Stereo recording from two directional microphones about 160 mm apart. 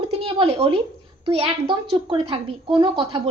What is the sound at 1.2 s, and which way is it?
A woman's voice, 35° right (ahead or behind).